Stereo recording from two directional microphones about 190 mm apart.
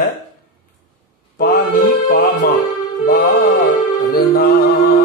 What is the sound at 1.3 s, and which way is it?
Mantra, 45° left (ahead or behind).